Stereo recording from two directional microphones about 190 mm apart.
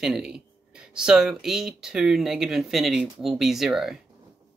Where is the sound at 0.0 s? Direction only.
5° right (ahead or behind).